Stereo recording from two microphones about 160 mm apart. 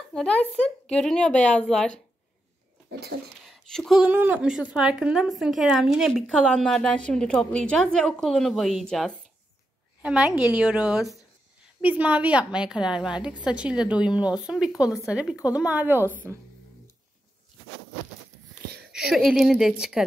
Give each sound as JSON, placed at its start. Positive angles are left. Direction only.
{"t": 0.1, "sound": "speech", "side_deg": 5}
{"t": 2.9, "sound": "speech", "side_deg": -90}
{"t": 3.4, "sound": "a sound", "side_deg": 0}
{"t": 4.0, "sound": "a woman's voice", "side_deg": -10}
{"t": 18.9, "sound": "speech", "side_deg": -5}